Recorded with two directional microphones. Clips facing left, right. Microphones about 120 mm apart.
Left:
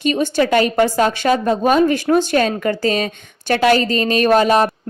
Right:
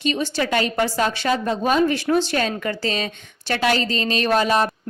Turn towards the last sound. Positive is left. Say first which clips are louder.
# left 6 dB
turn(degrees=45)  # may be behind; listen again after turning